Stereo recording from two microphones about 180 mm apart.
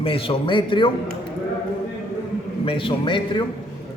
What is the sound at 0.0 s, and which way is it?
Speech, 30° left (ahead or behind).